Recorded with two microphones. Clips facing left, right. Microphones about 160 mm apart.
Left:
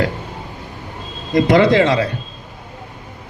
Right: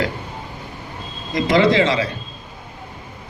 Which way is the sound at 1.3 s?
60° left (ahead or behind).